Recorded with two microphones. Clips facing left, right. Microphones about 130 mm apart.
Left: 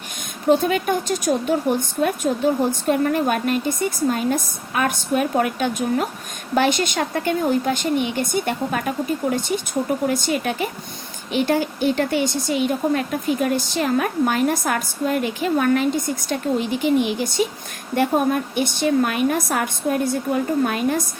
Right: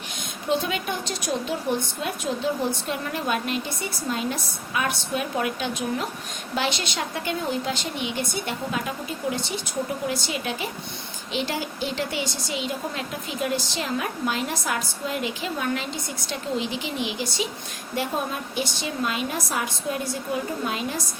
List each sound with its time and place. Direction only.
0.4 s speech: 45° left (ahead or behind)
10.1 s a woman's voice: 50° left (ahead or behind)